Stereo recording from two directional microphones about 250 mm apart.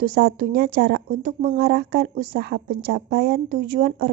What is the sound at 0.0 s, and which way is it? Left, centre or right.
Speech, right.